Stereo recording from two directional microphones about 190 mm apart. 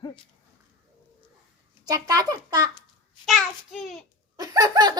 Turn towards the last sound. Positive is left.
turn(degrees=-20)  # may be behind; listen again after turning